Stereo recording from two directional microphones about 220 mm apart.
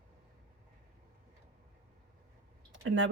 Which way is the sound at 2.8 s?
60° right (ahead or behind).